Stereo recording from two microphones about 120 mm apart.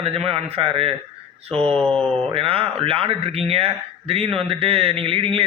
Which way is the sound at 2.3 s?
50° right (ahead or behind).